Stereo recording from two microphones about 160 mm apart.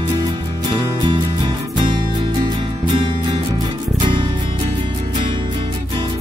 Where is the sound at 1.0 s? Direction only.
30° right (ahead or behind).